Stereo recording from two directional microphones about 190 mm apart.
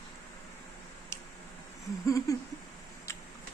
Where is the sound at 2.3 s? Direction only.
20° left (ahead or behind).